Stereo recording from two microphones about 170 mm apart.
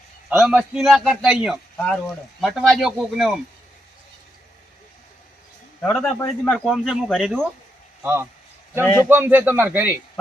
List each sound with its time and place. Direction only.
0.3 s speech: 5° right (ahead or behind)
5.8 s speech: 5° left (ahead or behind)
8.0 s speech: 15° right (ahead or behind)
8.8 s speech: 15° left (ahead or behind)
9.0 s speech: 10° right (ahead or behind)